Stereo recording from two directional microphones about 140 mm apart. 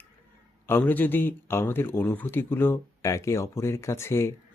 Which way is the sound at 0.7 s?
15° left (ahead or behind).